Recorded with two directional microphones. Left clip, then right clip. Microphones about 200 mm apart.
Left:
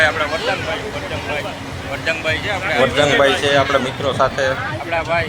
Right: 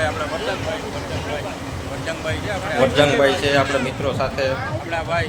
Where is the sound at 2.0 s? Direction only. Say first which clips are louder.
Left 7 dB; 15° left (ahead or behind).